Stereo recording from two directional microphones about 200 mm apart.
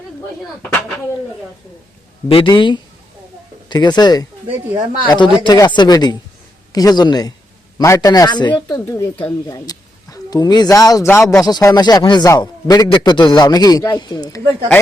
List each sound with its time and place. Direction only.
0.6 s speech: 5° left (ahead or behind)
2.3 s speech: 25° left (ahead or behind)
4.4 s speech: 25° right (ahead or behind)
5.0 s speech: 25° left (ahead or behind)